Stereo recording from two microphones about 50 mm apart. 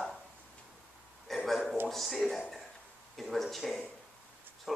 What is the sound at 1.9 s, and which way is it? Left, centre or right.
A man's voice, centre.